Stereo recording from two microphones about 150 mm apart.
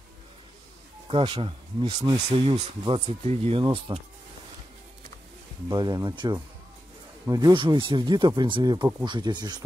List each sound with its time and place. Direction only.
1.0 s speech: 35° right (ahead or behind)
5.7 s speech: 25° right (ahead or behind)